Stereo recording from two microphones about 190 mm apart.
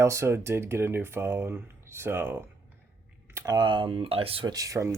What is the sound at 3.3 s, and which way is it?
Speech, 20° right (ahead or behind).